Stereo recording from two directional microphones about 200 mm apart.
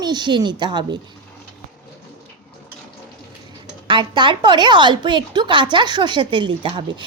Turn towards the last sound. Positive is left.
turn(degrees=-25)  # may be behind; listen again after turning